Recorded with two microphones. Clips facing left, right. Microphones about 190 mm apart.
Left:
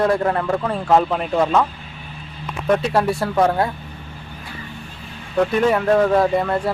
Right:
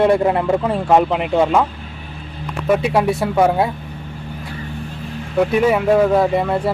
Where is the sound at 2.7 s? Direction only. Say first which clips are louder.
Right 2 dB; 5° right (ahead or behind).